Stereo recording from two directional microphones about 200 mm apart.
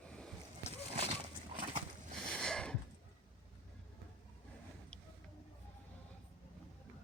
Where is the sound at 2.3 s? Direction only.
5° left (ahead or behind).